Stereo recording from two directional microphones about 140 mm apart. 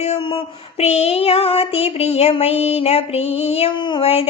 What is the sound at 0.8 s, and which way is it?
Child singing, 50° left (ahead or behind).